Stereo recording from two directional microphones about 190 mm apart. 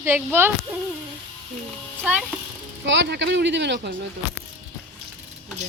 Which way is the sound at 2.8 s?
70° right (ahead or behind).